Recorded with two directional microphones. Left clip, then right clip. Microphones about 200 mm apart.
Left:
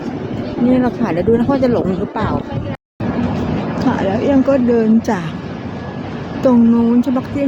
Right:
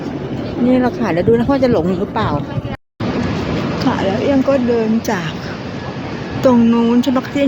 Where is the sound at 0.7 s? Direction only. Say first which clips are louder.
Right 1 dB; 5° left (ahead or behind).